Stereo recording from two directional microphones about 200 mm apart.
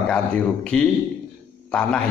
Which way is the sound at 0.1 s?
5° left (ahead or behind).